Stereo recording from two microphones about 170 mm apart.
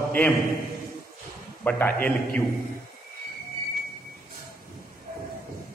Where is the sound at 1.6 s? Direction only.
10° left (ahead or behind).